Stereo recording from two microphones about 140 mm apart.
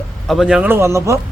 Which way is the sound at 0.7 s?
20° right (ahead or behind).